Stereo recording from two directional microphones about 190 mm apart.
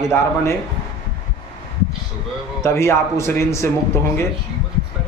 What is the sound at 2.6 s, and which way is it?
A man's voice, 15° left (ahead or behind).